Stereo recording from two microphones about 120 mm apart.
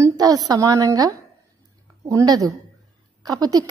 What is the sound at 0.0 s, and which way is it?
A woman's voice, 30° right (ahead or behind).